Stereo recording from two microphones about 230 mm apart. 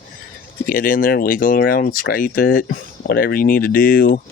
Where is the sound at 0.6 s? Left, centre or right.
Left.